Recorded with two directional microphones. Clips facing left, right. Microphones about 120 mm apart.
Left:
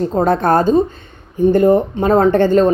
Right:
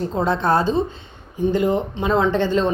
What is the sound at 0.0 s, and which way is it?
A woman's voice, 45° left (ahead or behind).